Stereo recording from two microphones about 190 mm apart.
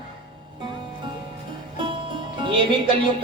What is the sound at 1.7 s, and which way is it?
Music, 25° right (ahead or behind).